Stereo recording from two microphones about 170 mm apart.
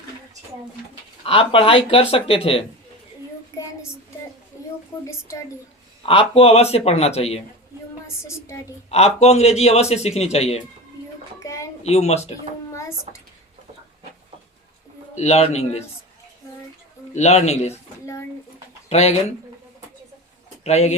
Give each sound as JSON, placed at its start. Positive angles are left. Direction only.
{"t": 1.2, "sound": "speech", "side_deg": 30}
{"t": 5.0, "sound": "a woman's voice", "side_deg": 15}
{"t": 6.1, "sound": "speech", "side_deg": 35}
{"t": 8.0, "sound": "a woman's voice", "side_deg": 15}
{"t": 8.9, "sound": "speech", "side_deg": 40}
{"t": 11.4, "sound": "a sound", "side_deg": 15}
{"t": 11.8, "sound": "speech", "side_deg": 40}
{"t": 15.1, "sound": "speech", "side_deg": 40}
{"t": 17.2, "sound": "speech", "side_deg": 40}
{"t": 18.9, "sound": "speech", "side_deg": 40}
{"t": 20.7, "sound": "speech", "side_deg": 40}